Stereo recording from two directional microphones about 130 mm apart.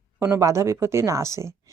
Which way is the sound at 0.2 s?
25° right (ahead or behind).